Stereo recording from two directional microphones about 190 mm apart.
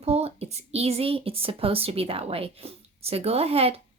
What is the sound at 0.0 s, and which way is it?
Speech, 35° right (ahead or behind).